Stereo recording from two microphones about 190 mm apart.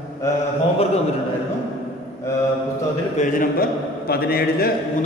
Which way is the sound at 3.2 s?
45° left (ahead or behind).